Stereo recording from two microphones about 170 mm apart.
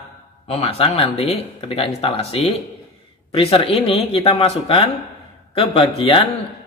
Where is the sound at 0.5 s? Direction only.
35° left (ahead or behind).